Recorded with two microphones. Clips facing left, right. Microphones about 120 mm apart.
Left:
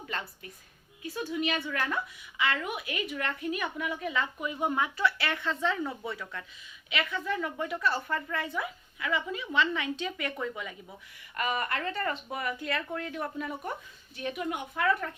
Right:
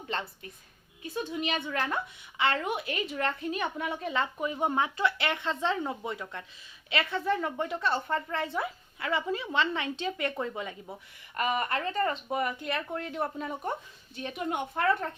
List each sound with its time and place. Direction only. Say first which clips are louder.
1.0 s speech: left 1 dB; 25° right (ahead or behind)